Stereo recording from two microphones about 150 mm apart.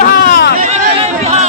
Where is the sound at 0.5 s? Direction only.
55° right (ahead or behind).